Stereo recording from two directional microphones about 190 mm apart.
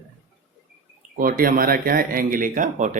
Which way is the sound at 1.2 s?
50° right (ahead or behind).